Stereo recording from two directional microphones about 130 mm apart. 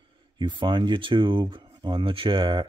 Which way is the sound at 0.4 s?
35° right (ahead or behind).